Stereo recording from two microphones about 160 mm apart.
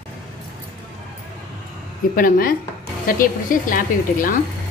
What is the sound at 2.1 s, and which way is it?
A woman's voice, 60° left (ahead or behind).